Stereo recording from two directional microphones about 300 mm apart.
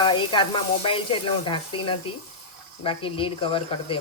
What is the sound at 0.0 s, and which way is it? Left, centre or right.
Sizzle, centre.